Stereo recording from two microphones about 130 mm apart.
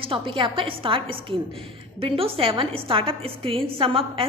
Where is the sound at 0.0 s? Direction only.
40° right (ahead or behind).